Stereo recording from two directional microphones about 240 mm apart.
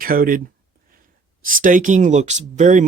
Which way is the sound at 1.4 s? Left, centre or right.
Right.